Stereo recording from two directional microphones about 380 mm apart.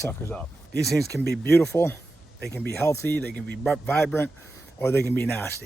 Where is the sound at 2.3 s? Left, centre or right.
Left.